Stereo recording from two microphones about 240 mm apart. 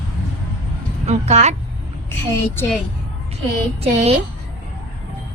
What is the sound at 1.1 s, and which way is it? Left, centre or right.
Speech, right.